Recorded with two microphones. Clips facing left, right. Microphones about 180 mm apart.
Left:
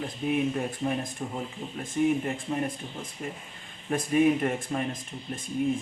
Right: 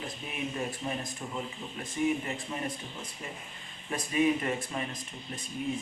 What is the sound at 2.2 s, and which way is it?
Speech, 50° left (ahead or behind).